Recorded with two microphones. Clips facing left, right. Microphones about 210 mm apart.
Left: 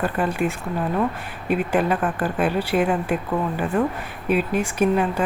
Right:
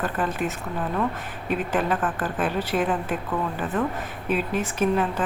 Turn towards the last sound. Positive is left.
turn(degrees=10)  # may be behind; listen again after turning